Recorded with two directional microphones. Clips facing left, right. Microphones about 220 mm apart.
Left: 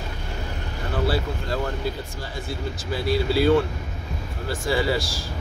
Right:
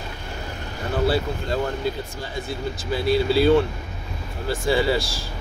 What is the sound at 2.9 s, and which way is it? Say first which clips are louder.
Speech: right 3 dB; 25° right (ahead or behind).